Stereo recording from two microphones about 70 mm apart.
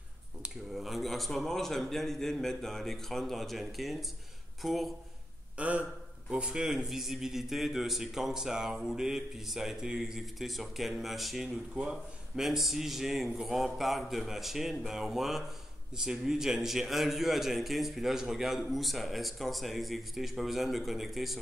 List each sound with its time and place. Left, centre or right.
0.4 s a man's voice: centre
5.6 s a man's voice: right; by 21.4 s centre